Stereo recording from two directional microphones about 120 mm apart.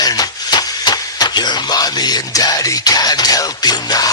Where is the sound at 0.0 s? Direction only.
35° left (ahead or behind).